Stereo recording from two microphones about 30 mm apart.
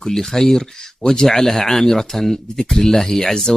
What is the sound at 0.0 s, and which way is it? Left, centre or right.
Speech, centre.